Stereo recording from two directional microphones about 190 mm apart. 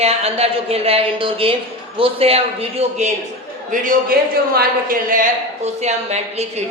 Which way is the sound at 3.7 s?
45° right (ahead or behind).